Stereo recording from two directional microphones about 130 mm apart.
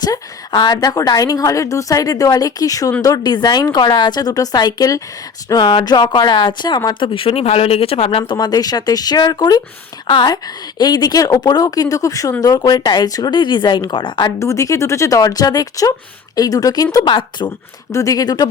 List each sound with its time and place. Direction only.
0.0 s a woman's voice: 30° left (ahead or behind)
8.4 s a woman's voice: 30° left (ahead or behind)
14.3 s speech: 25° left (ahead or behind)
17.9 s speech: 25° left (ahead or behind)